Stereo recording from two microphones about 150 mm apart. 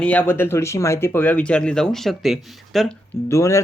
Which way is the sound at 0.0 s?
10° left (ahead or behind).